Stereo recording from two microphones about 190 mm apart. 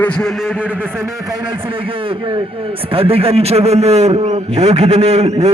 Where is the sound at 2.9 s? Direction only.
30° right (ahead or behind).